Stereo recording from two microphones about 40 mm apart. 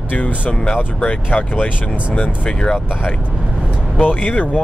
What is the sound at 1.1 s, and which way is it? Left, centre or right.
Speech, left.